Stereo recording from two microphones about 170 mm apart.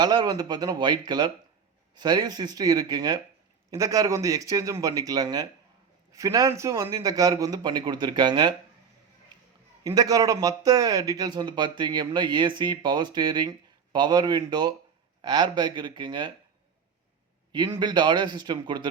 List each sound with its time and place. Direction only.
0.0 s speech: 25° right (ahead or behind)
9.8 s speech: 20° right (ahead or behind)
17.7 s speech: 25° right (ahead or behind)